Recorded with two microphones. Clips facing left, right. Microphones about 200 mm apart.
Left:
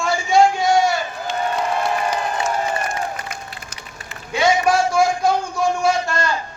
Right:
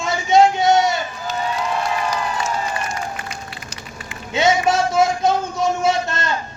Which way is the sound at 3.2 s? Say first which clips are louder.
Right 1 dB; 55° left (ahead or behind).